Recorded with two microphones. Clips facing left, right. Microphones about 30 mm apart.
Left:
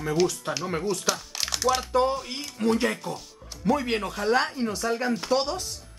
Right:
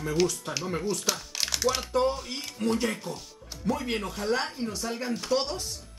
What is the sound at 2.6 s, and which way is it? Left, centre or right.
Speech, left.